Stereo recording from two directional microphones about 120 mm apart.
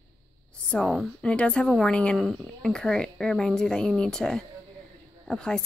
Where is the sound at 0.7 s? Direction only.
5° left (ahead or behind).